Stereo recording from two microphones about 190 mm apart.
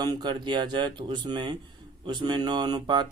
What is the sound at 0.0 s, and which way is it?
Speech, 20° right (ahead or behind).